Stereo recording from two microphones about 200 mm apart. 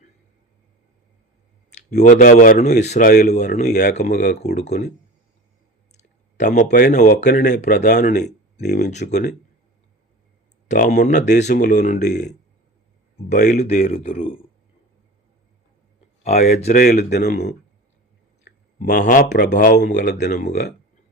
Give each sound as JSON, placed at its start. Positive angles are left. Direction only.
{"t": 2.0, "sound": "a man's voice", "side_deg": 35}
{"t": 5.9, "sound": "a sound", "side_deg": 35}
{"t": 6.9, "sound": "a man's voice", "side_deg": 35}
{"t": 10.7, "sound": "a man's voice", "side_deg": 40}
{"t": 13.6, "sound": "a man's voice", "side_deg": 30}
{"t": 16.7, "sound": "speech", "side_deg": 45}
{"t": 18.4, "sound": "a sound", "side_deg": 45}
{"t": 19.4, "sound": "speech", "side_deg": 55}
{"t": 20.2, "sound": "speech", "side_deg": 40}